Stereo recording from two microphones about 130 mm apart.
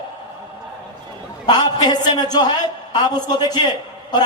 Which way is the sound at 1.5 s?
30° left (ahead or behind).